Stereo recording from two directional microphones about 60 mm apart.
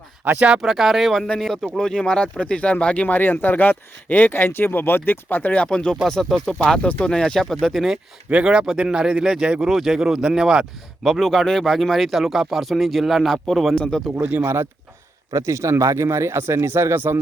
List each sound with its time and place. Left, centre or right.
0.6 s speech: centre; by 5.6 s left
5.6 s speech: centre
8.3 s speech: centre
11.0 s speech: centre
13.7 s speech: centre
14.2 s speech: right
14.4 s speech: right